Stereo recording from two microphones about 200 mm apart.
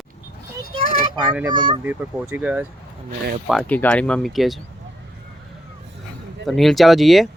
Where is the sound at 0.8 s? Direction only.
45° left (ahead or behind).